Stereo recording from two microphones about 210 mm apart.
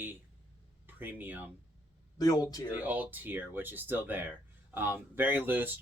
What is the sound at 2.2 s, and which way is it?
Speech, 15° left (ahead or behind).